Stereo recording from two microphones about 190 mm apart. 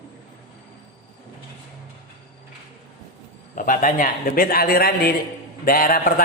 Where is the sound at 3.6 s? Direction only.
45° left (ahead or behind).